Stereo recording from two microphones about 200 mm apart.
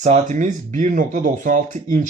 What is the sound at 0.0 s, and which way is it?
Speech, 35° right (ahead or behind).